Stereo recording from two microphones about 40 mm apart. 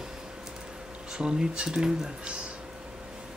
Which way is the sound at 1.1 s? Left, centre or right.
Right.